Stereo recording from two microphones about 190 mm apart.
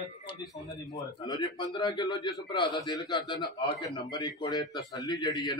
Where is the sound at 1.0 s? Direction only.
20° left (ahead or behind).